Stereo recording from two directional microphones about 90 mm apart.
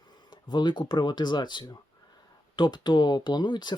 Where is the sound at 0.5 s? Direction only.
60° left (ahead or behind).